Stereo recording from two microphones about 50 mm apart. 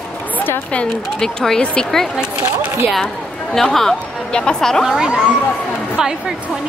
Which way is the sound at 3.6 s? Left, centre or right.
Centre.